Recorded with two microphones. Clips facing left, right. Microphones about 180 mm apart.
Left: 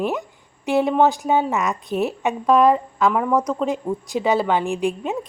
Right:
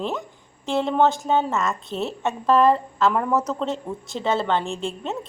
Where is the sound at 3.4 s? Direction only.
15° left (ahead or behind).